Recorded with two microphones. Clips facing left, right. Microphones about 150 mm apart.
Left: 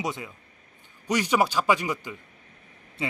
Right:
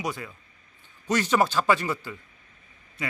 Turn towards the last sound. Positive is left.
turn(degrees=30)  # may be behind; listen again after turning